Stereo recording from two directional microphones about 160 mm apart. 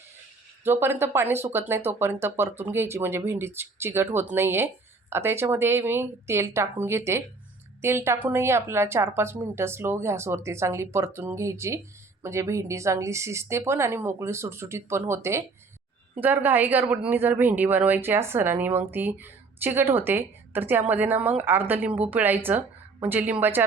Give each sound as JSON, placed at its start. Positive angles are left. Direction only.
{"t": 0.6, "sound": "speech", "side_deg": -15}